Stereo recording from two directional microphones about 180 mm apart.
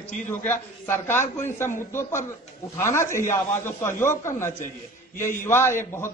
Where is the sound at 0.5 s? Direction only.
15° left (ahead or behind).